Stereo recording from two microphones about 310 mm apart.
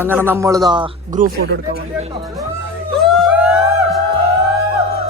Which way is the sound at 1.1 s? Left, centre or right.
Right.